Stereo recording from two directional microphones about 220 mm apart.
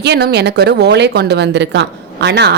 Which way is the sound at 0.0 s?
50° right (ahead or behind).